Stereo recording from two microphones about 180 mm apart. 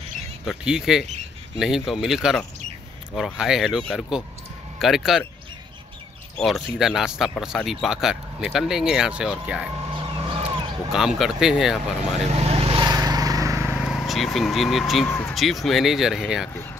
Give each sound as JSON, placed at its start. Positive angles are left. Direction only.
{"t": 0.5, "sound": "speech", "side_deg": -5}
{"t": 6.3, "sound": "speech", "side_deg": 0}
{"t": 9.8, "sound": "vehicle", "side_deg": -30}
{"t": 10.9, "sound": "speech", "side_deg": 0}
{"t": 12.4, "sound": "vehicle", "side_deg": -35}
{"t": 13.7, "sound": "speech", "side_deg": 0}